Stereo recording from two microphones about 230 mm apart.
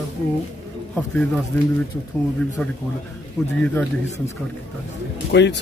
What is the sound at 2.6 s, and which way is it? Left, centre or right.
Speech, centre.